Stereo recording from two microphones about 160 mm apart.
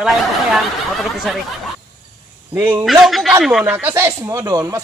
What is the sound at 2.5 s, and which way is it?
Speech, 15° right (ahead or behind).